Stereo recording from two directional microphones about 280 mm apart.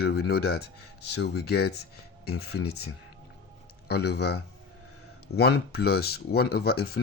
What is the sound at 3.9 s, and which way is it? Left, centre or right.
Speech, left.